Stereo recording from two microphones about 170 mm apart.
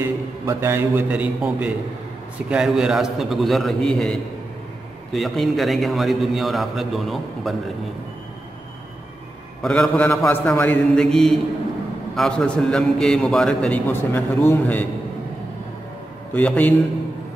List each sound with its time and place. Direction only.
0.0 s a man's voice: 15° right (ahead or behind)
9.6 s a man's voice: 5° left (ahead or behind)
16.3 s a man's voice: 10° left (ahead or behind)